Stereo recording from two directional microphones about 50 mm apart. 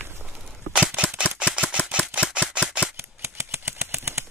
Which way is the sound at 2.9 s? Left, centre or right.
Right.